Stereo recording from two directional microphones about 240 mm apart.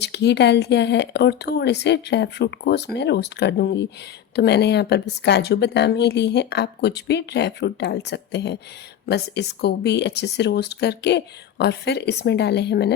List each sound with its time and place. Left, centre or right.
0.0 s speech: left